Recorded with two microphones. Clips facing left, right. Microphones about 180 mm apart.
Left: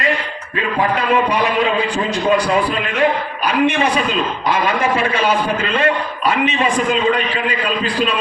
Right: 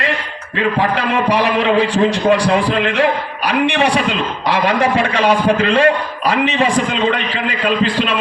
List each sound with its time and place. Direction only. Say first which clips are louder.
0.9 s a man's voice: right 1 dB; 75° right (ahead or behind)
3.4 s a man's voice: right 1 dB; 70° right (ahead or behind)